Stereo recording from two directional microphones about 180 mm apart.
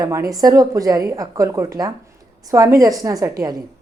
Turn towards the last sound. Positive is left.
turn(degrees=-20)  # may be behind; listen again after turning